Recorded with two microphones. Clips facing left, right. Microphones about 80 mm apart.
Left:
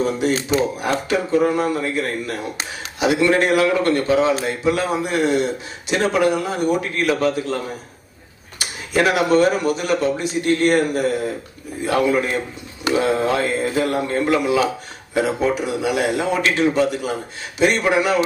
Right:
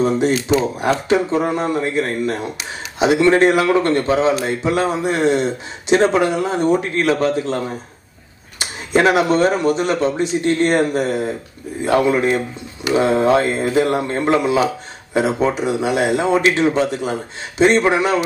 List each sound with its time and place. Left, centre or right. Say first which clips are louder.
0.7 s a man's voice: right 4 dB; right
8.5 s a man's voice: right 3 dB; right